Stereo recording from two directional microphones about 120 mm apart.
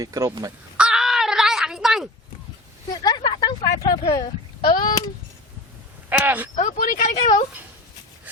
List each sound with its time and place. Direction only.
0.0 s speech: 30° right (ahead or behind)
0.8 s caw: 5° right (ahead or behind)
2.9 s a sound: 35° left (ahead or behind)
4.2 s speech: 35° left (ahead or behind)
6.1 s speech: 15° right (ahead or behind)
6.6 s a woman's voice: 90° left